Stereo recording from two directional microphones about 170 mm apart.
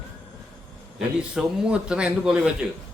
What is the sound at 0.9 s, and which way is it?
A man's voice, 5° right (ahead or behind).